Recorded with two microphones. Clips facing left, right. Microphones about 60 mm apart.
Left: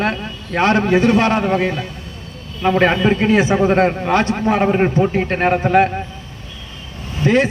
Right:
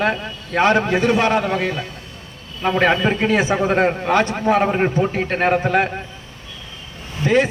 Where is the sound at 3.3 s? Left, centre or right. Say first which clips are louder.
Left 3 dB; left.